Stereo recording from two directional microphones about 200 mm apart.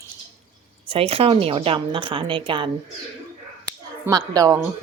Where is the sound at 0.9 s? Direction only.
30° right (ahead or behind).